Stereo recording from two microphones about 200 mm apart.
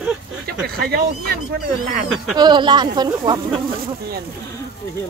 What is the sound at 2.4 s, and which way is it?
Speech, 20° right (ahead or behind).